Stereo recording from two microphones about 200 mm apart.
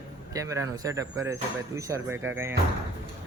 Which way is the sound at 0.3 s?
15° right (ahead or behind).